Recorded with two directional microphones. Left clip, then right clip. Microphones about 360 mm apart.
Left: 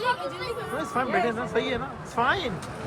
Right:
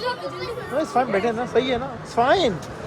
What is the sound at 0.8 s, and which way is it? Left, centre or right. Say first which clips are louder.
Speech: right 5 dB; centre.